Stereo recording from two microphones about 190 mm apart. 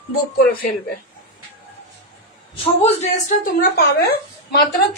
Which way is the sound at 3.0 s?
40° left (ahead or behind).